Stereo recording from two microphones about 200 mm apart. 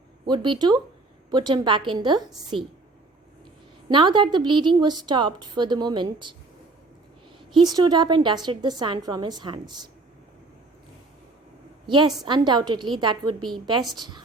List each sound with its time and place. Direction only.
0.3 s a woman's voice: 25° right (ahead or behind)
3.8 s a woman's voice: 25° right (ahead or behind)
7.5 s a woman's voice: 20° right (ahead or behind)
11.9 s a woman's voice: 25° right (ahead or behind)